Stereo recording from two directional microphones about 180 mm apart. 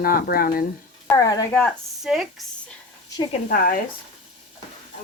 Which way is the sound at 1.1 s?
20° left (ahead or behind).